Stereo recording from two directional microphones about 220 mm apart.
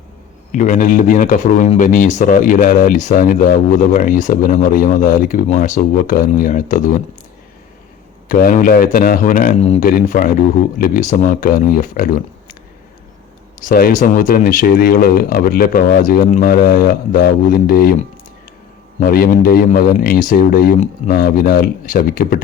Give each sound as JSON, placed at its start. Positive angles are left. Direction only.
{"t": 0.5, "sound": "speech", "side_deg": 35}
{"t": 8.3, "sound": "speech", "side_deg": 35}
{"t": 13.6, "sound": "speech", "side_deg": 40}
{"t": 18.9, "sound": "speech", "side_deg": 40}